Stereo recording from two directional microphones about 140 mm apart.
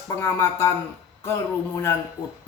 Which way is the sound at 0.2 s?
15° left (ahead or behind).